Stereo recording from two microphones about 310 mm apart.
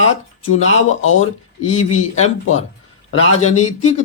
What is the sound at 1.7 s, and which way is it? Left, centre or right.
Speech, left.